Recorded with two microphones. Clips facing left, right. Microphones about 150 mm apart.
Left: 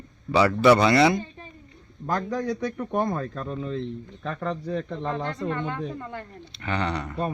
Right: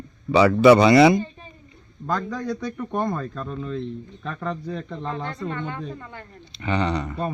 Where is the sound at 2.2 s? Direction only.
15° left (ahead or behind).